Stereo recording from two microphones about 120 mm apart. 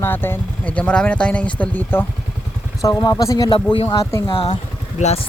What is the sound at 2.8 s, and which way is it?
Speech, 30° left (ahead or behind).